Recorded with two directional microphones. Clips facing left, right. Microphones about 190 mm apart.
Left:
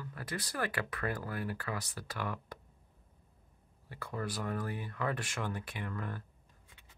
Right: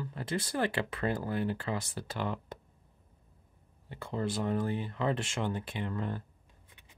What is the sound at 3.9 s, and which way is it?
Speech, 25° right (ahead or behind).